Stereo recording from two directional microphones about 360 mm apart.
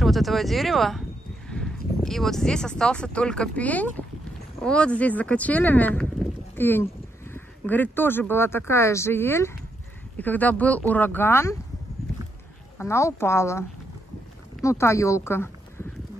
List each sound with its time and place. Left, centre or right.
0.0 s speech: centre
12.7 s speech: centre